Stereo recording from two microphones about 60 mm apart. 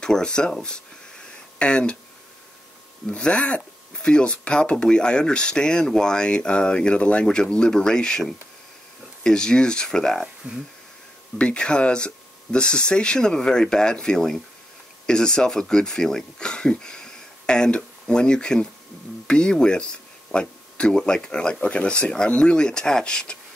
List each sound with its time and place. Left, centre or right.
0.0 s speech: centre
3.1 s speech: centre
10.4 s speech: centre
11.3 s speech: centre